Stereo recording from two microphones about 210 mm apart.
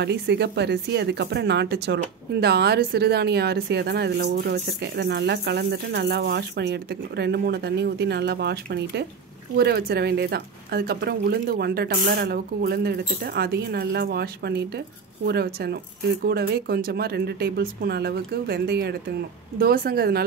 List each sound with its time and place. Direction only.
0.0 s a woman's voice: 50° right (ahead or behind)